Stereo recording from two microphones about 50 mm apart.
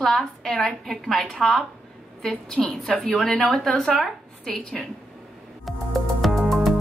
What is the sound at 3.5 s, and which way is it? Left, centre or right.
A woman's voice, centre.